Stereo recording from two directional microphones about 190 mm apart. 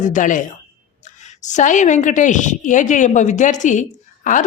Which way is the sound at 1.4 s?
40° left (ahead or behind).